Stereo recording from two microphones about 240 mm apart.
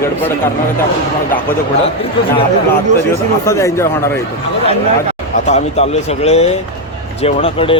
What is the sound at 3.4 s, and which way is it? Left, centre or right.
Speech, centre.